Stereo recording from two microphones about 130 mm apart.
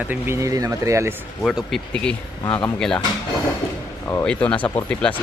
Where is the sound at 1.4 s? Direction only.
Centre (ahead or behind).